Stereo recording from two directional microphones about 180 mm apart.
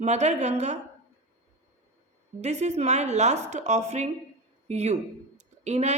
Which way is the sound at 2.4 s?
40° right (ahead or behind).